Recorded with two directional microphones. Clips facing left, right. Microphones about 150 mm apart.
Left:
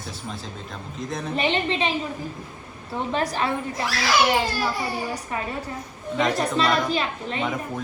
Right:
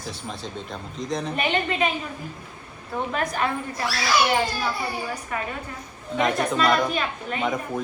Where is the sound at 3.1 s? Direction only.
30° left (ahead or behind).